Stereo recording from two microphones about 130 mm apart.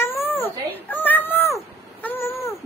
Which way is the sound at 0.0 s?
20° left (ahead or behind).